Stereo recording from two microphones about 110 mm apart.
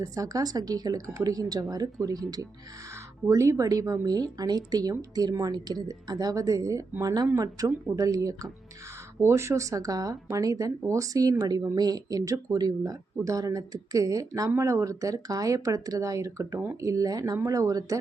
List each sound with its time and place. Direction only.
0.0 s speech: 30° right (ahead or behind)